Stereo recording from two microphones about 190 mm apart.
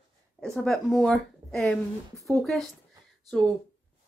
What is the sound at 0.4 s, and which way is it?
Speech, centre (ahead or behind).